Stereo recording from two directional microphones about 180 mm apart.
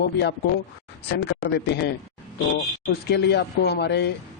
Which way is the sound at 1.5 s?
70° left (ahead or behind).